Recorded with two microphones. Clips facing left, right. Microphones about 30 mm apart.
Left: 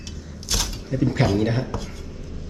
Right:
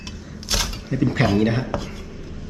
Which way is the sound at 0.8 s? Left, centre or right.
Right.